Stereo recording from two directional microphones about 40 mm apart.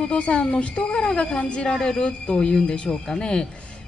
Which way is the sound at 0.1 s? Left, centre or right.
Left.